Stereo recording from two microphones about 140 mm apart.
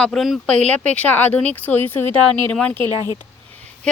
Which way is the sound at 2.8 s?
25° right (ahead or behind).